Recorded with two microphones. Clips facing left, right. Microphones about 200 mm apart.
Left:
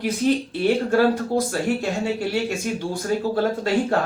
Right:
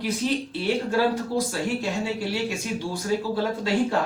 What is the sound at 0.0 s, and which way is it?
Speech, 50° left (ahead or behind).